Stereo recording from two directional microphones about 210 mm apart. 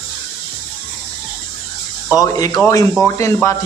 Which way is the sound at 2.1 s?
15° left (ahead or behind).